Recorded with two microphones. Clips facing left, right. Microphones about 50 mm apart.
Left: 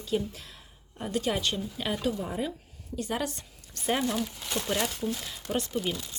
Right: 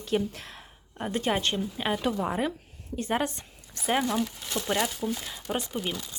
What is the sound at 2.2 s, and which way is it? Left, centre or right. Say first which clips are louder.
Speech: right 4 dB; right.